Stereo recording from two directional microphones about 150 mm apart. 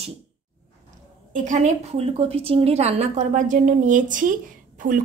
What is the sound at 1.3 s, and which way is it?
A woman's voice, 55° right (ahead or behind).